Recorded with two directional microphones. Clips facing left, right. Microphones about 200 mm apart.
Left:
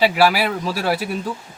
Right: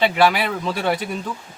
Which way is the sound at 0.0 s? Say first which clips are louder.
Left 1 dB; 5° left (ahead or behind).